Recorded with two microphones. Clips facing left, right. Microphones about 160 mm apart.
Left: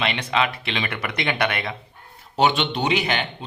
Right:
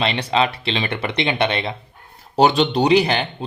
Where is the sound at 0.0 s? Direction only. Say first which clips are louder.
Right 4 dB; 35° right (ahead or behind).